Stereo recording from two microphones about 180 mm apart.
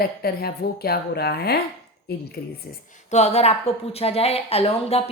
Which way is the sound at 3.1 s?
35° left (ahead or behind).